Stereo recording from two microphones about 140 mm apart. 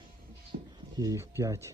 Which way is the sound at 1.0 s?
25° right (ahead or behind).